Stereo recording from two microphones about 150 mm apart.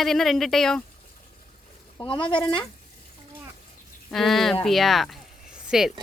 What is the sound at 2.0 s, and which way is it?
Speech, 35° left (ahead or behind).